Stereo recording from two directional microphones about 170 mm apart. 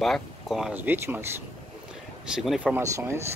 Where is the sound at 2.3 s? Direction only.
5° right (ahead or behind).